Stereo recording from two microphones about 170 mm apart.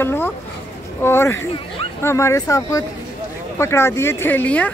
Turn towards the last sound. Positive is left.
turn(degrees=10)  # may be behind; listen again after turning